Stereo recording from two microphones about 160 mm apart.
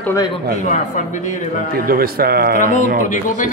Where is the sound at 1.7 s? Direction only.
65° right (ahead or behind).